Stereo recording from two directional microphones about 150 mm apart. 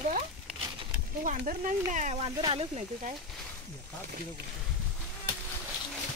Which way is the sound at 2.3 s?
30° right (ahead or behind).